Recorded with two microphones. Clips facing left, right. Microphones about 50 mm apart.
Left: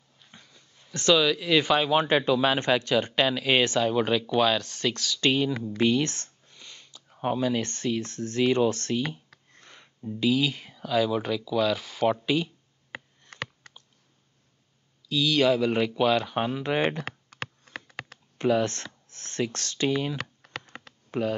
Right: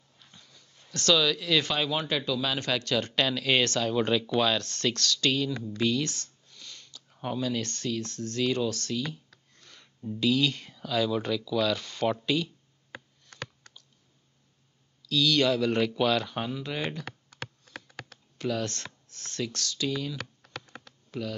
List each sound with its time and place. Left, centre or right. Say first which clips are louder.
0.3 s a sound: left 4 dB; left
1.9 s speech: left 7 dB; left
2.8 s speech: left 4 dB; centre
5.2 s speech: left 5 dB; left
9.3 s a sound: left 4 dB; left
10.0 s speech: left 1 dB; centre
13.2 s computer keyboard: left 4 dB; left
15.0 s speech: left 2 dB; centre
16.4 s speech: left 7 dB; left
17.0 s computer keyboard: left 4 dB; left
18.4 s a sound: left 7 dB; left
21.1 s speech: left 7 dB; left